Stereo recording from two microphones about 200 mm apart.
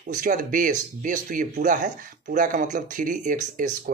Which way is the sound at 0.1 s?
40° right (ahead or behind).